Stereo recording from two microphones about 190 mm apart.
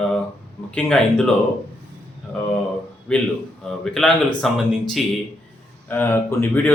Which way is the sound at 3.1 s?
5° left (ahead or behind).